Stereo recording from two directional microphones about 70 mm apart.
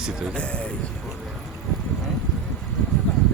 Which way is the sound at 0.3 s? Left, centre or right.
Centre.